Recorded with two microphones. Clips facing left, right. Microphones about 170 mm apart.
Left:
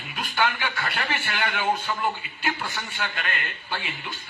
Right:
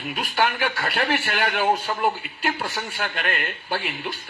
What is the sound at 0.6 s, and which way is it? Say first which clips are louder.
Speech: right 5 dB; 65° right (ahead or behind).